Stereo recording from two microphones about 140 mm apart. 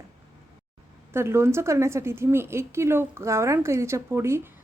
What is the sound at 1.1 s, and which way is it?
A woman's voice, 20° right (ahead or behind).